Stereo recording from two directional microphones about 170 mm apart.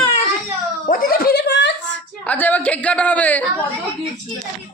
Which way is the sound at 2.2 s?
10° left (ahead or behind).